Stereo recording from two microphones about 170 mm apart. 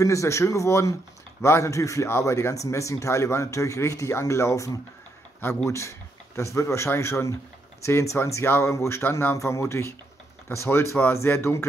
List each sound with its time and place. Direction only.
0.0 s speech: 20° left (ahead or behind)